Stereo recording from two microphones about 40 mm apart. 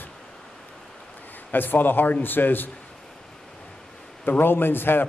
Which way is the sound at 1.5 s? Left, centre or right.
Left.